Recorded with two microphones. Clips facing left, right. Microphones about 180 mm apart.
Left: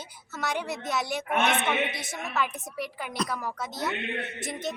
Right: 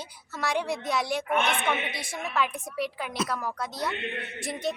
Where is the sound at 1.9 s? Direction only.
20° left (ahead or behind).